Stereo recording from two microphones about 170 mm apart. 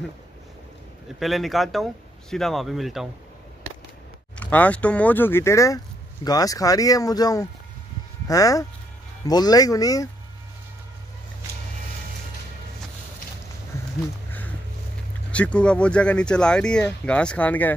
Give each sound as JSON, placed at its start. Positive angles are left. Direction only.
{"t": 1.2, "sound": "speech", "side_deg": 0}
{"t": 4.4, "sound": "speech", "side_deg": 10}
{"t": 15.3, "sound": "speech", "side_deg": 5}